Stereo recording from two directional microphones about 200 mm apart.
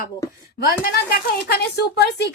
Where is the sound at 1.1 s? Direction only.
50° left (ahead or behind).